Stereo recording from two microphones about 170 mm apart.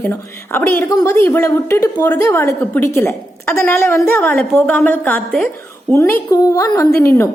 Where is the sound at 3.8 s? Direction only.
15° left (ahead or behind).